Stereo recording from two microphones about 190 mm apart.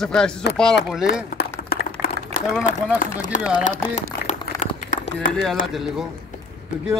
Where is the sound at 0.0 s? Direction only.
5° left (ahead or behind).